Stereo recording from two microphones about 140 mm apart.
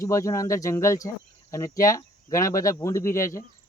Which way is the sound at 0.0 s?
20° left (ahead or behind).